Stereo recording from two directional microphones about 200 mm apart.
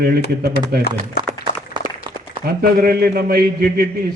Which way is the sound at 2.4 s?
50° right (ahead or behind).